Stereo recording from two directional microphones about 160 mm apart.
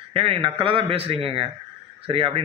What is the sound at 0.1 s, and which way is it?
Speech, 35° right (ahead or behind).